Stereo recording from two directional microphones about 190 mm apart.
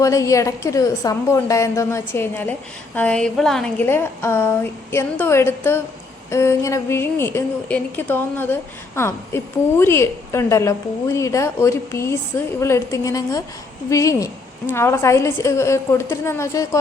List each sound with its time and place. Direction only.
0.0 s a woman's voice: 15° left (ahead or behind)